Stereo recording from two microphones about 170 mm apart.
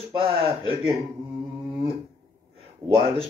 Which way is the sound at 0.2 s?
35° right (ahead or behind).